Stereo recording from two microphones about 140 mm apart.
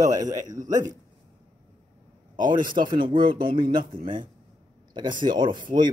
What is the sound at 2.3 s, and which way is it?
Speech, 70° right (ahead or behind).